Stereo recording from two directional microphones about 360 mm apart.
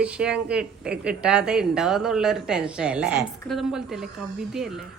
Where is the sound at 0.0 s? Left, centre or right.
Centre.